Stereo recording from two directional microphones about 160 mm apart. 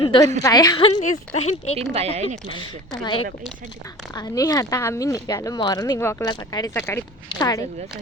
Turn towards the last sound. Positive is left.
turn(degrees=20)  # may be behind; listen again after turning